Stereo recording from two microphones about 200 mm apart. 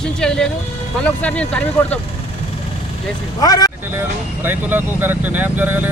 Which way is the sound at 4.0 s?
10° right (ahead or behind).